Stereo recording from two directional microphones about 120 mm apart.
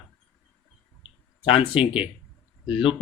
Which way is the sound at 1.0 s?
45° left (ahead or behind).